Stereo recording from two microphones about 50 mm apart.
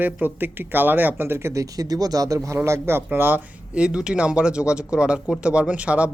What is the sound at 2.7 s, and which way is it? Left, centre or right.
Speech, right.